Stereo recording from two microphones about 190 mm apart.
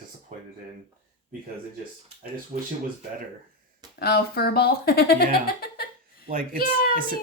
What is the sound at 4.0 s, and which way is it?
Speech, 55° left (ahead or behind).